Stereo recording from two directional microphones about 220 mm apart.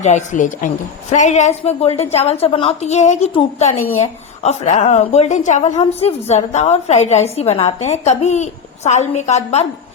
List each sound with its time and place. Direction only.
0.0 s a woman's voice: 30° left (ahead or behind)